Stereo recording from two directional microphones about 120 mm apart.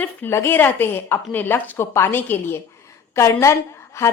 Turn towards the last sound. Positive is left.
turn(degrees=25)  # may be behind; listen again after turning